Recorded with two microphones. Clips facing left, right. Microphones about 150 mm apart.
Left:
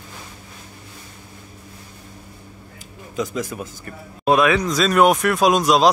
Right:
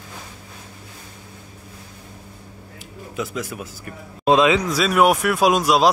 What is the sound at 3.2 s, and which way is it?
Speech, 5° right (ahead or behind).